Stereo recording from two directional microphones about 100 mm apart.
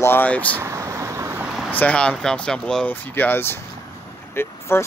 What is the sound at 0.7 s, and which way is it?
Vehicle, 30° right (ahead or behind).